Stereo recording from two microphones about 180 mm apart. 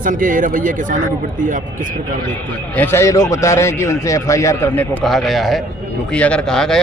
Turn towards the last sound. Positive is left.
turn(degrees=5)  # may be behind; listen again after turning